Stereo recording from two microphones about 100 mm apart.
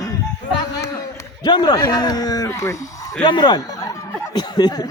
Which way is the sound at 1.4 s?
45° left (ahead or behind).